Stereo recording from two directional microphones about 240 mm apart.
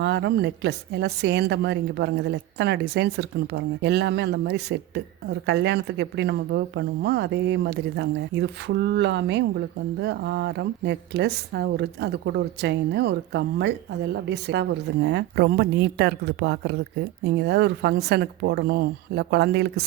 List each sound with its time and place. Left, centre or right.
0.0 s a woman's voice: right